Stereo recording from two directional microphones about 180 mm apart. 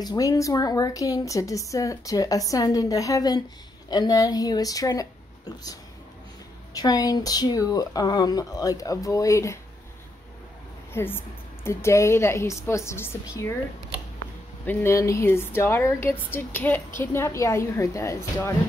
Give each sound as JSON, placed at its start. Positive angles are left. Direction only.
{"t": 0.0, "sound": "a woman's voice", "side_deg": 20}
{"t": 10.9, "sound": "a woman's voice", "side_deg": 15}
{"t": 14.7, "sound": "a woman's voice", "side_deg": 15}